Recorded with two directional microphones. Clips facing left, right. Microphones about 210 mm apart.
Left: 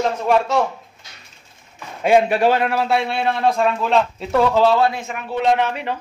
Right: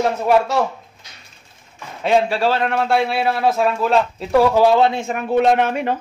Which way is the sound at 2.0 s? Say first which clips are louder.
Left 2 dB; 15° left (ahead or behind).